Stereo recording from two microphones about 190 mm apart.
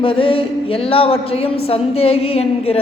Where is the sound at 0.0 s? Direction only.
30° left (ahead or behind).